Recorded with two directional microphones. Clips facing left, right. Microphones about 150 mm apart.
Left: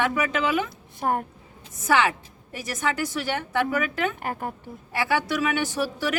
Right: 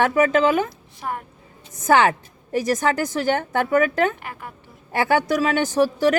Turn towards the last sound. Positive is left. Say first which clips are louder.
# right 8 dB
turn(degrees=-45)  # may be behind; listen again after turning